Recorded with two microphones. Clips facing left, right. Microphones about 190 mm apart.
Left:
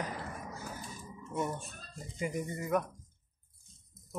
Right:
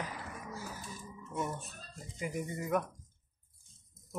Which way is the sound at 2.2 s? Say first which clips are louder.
Left 2 dB; 5° right (ahead or behind).